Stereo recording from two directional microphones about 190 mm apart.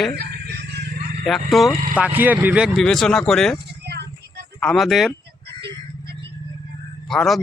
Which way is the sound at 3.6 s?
60° right (ahead or behind).